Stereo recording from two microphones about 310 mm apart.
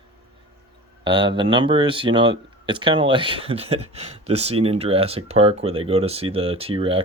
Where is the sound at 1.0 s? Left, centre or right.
Centre.